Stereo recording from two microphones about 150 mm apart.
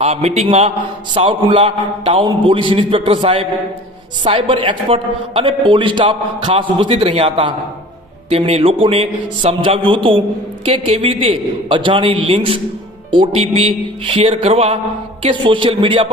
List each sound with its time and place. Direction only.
0.0 s a man's voice: 45° right (ahead or behind)